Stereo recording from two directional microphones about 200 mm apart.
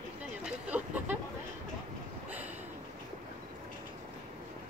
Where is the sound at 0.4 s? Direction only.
5° right (ahead or behind).